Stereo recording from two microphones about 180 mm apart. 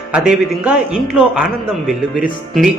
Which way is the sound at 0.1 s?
5° right (ahead or behind).